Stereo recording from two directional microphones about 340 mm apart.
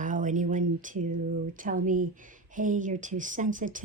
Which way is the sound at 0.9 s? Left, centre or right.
Right.